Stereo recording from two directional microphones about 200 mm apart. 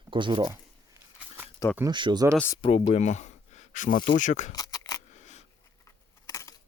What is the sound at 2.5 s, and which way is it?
Speech, 30° left (ahead or behind).